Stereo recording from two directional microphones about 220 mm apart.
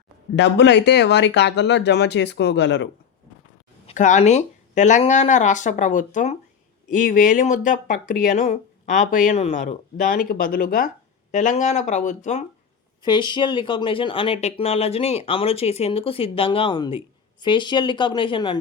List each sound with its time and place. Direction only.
0.3 s speech: 50° left (ahead or behind)
3.8 s speech: 35° left (ahead or behind)
13.0 s speech: 20° left (ahead or behind)